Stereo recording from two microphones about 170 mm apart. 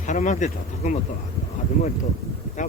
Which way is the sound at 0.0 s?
45° left (ahead or behind).